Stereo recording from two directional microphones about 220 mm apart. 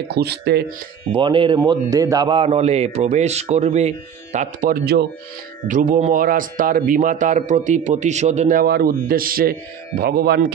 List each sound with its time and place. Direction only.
0.1 s speech: 45° right (ahead or behind)
1.1 s a man's voice: 25° right (ahead or behind); by 10.5 s 45° right (ahead or behind)